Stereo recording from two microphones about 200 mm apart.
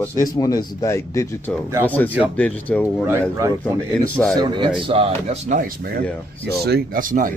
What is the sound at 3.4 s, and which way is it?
Speech, 15° right (ahead or behind).